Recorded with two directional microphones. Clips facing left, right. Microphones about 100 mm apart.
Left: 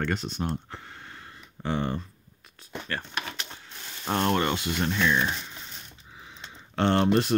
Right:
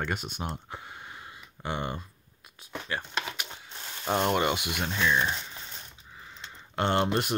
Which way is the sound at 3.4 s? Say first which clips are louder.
Even; 10° right (ahead or behind).